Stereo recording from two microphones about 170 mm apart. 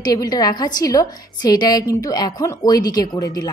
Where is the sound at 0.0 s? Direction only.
25° left (ahead or behind).